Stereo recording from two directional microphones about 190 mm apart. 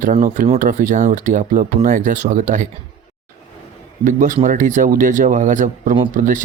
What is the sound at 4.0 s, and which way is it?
Speech, 40° right (ahead or behind).